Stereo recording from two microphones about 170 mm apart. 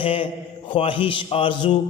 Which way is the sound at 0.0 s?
30° left (ahead or behind).